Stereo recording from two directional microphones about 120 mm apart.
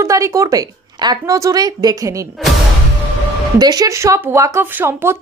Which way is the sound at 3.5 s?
35° right (ahead or behind).